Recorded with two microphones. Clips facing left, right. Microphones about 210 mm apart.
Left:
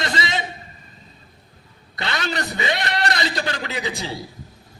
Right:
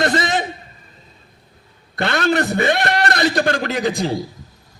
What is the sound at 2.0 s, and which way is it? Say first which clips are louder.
A man's voice: right 9 dB; 50° right (ahead or behind).